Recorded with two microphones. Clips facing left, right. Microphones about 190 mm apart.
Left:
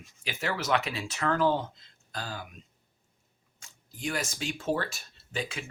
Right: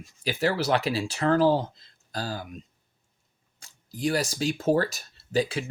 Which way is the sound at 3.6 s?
35° right (ahead or behind).